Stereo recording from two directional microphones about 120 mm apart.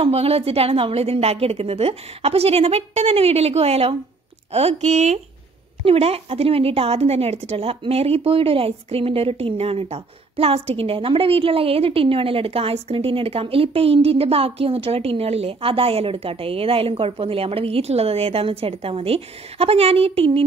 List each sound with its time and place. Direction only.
0.0 s a woman's voice: 55° right (ahead or behind)
5.9 s a woman's voice: 55° right (ahead or behind)